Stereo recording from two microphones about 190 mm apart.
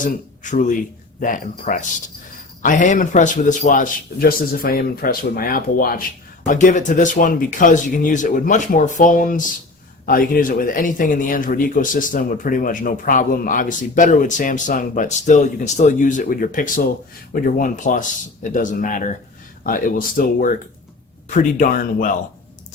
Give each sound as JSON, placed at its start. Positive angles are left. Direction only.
{"t": 0.0, "sound": "speech", "side_deg": 45}